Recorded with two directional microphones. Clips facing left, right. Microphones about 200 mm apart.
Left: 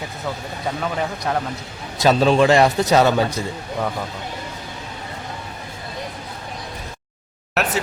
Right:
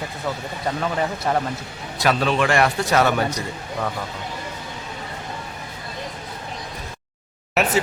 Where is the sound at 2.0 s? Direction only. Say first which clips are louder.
Left 5 dB; 30° left (ahead or behind).